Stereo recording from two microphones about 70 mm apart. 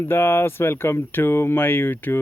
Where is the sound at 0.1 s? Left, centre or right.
Left.